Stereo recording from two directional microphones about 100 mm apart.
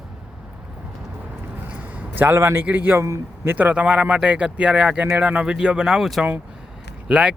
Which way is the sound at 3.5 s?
10° right (ahead or behind).